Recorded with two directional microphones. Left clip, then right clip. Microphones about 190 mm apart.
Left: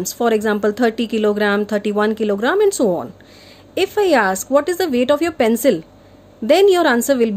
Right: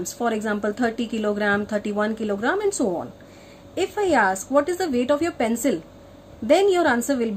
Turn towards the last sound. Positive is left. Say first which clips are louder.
# left 6 dB
turn(degrees=55)  # may be behind; listen again after turning